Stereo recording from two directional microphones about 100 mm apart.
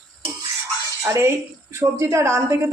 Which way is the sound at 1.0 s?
25° right (ahead or behind).